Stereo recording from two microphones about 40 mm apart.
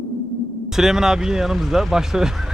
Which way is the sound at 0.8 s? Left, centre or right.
Centre.